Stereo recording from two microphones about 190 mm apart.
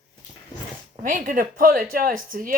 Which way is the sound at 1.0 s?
45° right (ahead or behind).